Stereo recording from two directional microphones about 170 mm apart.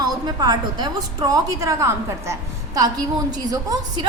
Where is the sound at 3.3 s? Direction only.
20° right (ahead or behind).